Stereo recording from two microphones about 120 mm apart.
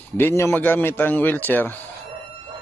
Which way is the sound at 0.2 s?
20° left (ahead or behind).